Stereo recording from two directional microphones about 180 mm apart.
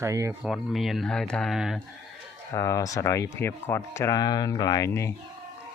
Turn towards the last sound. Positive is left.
turn(degrees=15)  # may be behind; listen again after turning